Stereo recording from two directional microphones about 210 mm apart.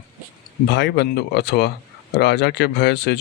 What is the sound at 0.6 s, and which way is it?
Speech, 55° left (ahead or behind).